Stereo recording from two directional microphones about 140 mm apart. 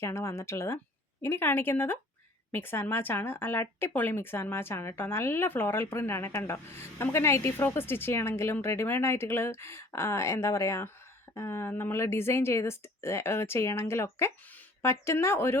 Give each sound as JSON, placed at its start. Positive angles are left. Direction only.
{"t": 0.0, "sound": "a woman's voice", "side_deg": 20}